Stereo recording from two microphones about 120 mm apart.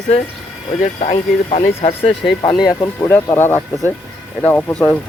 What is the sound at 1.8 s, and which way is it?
Speech, 55° left (ahead or behind).